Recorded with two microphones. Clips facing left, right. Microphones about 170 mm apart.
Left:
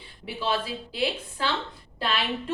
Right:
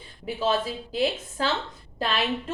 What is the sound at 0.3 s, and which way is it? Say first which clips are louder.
A woman's voice: right 3 dB; 45° right (ahead or behind).